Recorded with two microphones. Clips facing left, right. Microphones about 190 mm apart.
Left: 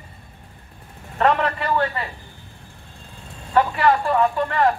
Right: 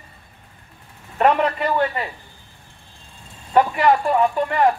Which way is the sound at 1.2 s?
20° right (ahead or behind).